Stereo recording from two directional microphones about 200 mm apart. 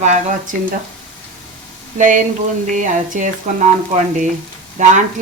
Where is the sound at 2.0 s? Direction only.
40° right (ahead or behind).